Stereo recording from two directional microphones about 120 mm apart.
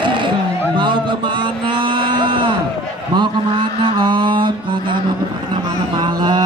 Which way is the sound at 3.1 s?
40° right (ahead or behind).